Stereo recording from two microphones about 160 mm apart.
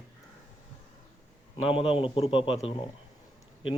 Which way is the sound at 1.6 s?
35° left (ahead or behind).